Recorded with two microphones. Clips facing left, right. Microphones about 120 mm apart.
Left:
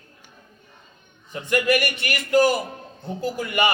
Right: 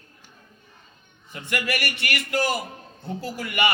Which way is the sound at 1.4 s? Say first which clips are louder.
Left 7 dB; 15° left (ahead or behind).